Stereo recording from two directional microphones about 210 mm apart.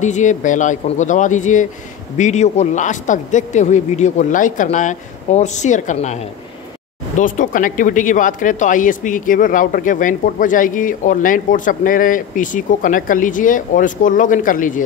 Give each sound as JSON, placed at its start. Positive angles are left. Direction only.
{"t": 0.0, "sound": "speech", "side_deg": 35}
{"t": 7.2, "sound": "speech", "side_deg": 40}